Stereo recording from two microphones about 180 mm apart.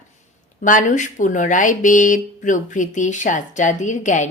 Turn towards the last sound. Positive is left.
turn(degrees=45)  # may be behind; listen again after turning